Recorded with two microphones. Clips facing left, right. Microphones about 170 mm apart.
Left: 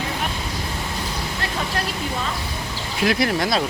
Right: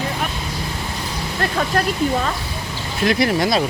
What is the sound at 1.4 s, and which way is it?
Speech, 50° right (ahead or behind).